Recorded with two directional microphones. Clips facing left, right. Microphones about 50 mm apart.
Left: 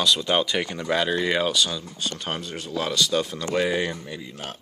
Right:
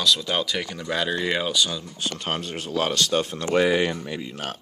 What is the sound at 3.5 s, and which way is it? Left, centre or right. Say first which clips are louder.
Speech: right 4 dB; right.